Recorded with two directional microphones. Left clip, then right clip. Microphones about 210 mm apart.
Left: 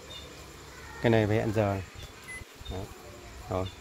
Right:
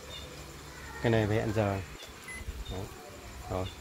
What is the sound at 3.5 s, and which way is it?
Speech, 50° left (ahead or behind).